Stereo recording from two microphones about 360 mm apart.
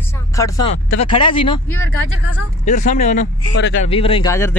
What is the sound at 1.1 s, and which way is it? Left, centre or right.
Speech, centre.